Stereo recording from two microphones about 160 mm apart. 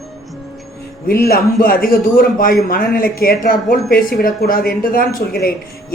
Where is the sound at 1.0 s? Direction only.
70° left (ahead or behind).